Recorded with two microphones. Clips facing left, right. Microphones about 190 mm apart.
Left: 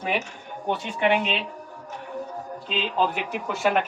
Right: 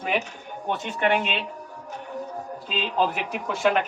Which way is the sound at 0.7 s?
15° left (ahead or behind).